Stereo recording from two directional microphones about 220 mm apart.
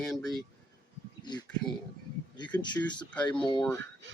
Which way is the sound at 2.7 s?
20° left (ahead or behind).